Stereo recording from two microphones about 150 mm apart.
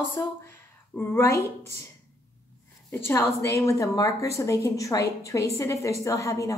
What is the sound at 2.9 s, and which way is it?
A woman's voice, 15° left (ahead or behind).